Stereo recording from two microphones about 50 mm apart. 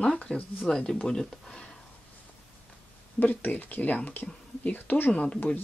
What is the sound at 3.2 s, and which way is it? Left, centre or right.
Speech, left.